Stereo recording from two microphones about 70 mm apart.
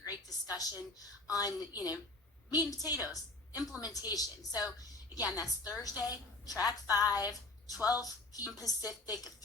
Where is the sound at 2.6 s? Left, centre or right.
Left.